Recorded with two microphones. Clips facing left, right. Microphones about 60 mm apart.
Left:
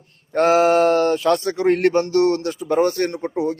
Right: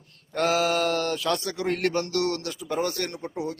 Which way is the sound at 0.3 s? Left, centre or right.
Left.